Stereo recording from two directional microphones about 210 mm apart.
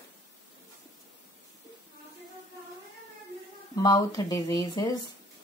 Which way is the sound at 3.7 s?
15° left (ahead or behind).